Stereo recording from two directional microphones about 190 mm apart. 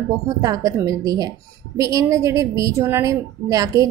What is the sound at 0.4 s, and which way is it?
A woman's voice, 20° right (ahead or behind).